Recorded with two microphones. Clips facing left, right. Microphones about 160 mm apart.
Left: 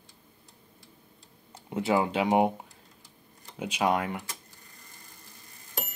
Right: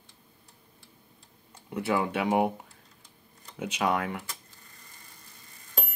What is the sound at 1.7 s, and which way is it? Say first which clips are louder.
Speech: left 2 dB; 20° left (ahead or behind).